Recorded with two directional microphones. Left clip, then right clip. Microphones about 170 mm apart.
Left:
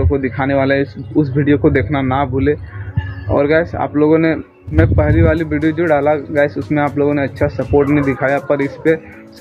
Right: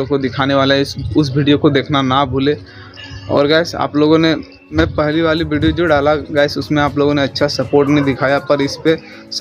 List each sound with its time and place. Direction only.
0.1 s a man's voice: 20° right (ahead or behind)